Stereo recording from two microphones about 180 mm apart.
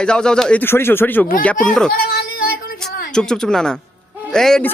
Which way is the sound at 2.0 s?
60° left (ahead or behind).